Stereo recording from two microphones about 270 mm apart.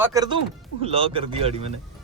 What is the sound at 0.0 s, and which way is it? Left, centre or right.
Speech, centre.